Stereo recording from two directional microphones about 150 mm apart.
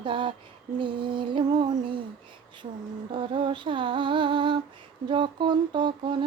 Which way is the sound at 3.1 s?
35° right (ahead or behind).